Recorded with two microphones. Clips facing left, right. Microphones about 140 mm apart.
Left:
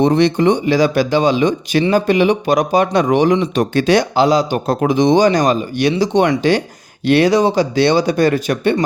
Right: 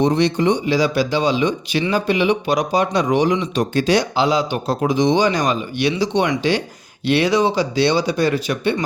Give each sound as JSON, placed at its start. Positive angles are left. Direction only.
{"t": 0.0, "sound": "speech", "side_deg": 55}